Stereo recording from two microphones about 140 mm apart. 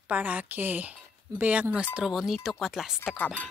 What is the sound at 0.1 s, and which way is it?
A woman's voice, 10° right (ahead or behind).